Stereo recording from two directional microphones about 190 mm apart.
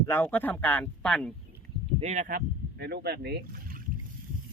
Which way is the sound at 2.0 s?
35° right (ahead or behind).